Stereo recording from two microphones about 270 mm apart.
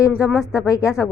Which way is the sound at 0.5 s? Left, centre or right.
Centre.